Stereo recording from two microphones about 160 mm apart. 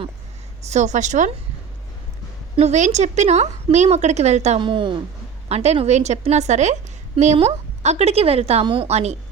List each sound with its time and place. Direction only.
0.7 s a woman's voice: 45° right (ahead or behind)
2.6 s a woman's voice: 45° right (ahead or behind)
4.6 s a woman's voice: 30° right (ahead or behind)